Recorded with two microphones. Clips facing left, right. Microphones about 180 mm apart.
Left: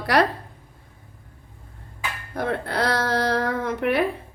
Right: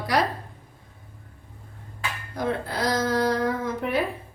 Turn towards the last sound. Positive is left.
turn(degrees=70)  # may be behind; listen again after turning